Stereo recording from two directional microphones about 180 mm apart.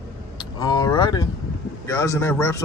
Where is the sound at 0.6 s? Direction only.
20° left (ahead or behind).